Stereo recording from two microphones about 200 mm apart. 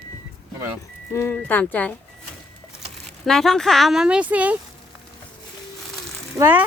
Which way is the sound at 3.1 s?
Centre (ahead or behind).